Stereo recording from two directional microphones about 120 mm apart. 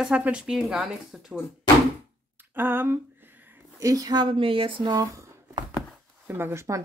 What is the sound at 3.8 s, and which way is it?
A woman's voice, 30° right (ahead or behind).